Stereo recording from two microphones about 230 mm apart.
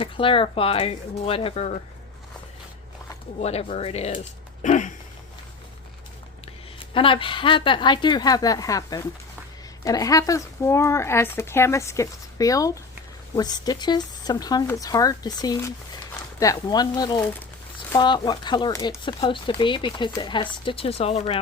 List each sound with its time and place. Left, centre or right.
0.0 s speech: left
3.4 s speech: left
4.6 s a sound: left
6.7 s speech: left